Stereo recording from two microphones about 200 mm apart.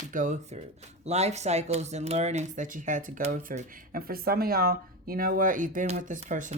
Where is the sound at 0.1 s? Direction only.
40° right (ahead or behind).